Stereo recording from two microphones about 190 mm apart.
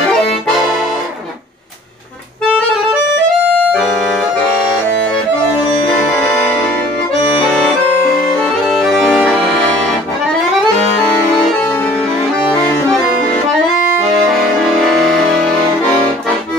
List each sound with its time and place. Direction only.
0.6 s accordion: centre (ahead or behind)
3.6 s music: centre (ahead or behind)
8.6 s accordion: 5° right (ahead or behind)
11.4 s music: 5° left (ahead or behind)
14.6 s music: centre (ahead or behind)